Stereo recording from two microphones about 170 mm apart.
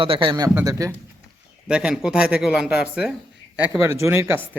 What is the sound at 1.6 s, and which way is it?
A man's voice, 5° right (ahead or behind).